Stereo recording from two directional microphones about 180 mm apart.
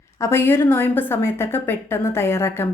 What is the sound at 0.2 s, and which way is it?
Speech, 15° left (ahead or behind).